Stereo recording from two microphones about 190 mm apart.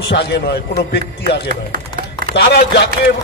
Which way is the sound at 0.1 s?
60° left (ahead or behind).